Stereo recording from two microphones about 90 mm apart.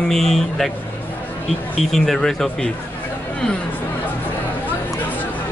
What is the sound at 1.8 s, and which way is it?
Speech, 5° left (ahead or behind).